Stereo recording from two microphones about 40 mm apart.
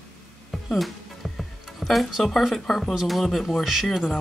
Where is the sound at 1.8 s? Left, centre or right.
Centre.